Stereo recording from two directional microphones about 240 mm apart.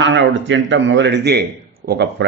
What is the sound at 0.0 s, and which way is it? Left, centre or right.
A man's voice, right.